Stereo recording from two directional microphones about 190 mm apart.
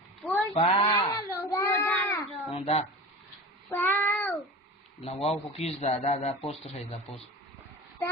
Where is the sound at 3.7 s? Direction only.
10° left (ahead or behind).